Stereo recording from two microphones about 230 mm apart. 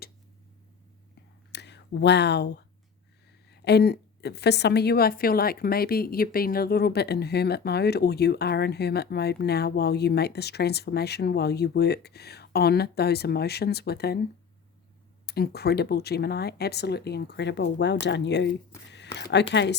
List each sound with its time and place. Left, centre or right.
1.5 s a woman's voice: left
15.3 s a woman's voice: left